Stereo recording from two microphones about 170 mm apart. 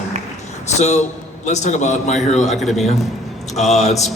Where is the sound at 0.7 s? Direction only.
40° left (ahead or behind).